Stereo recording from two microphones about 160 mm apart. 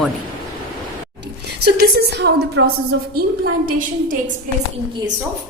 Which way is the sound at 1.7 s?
85° right.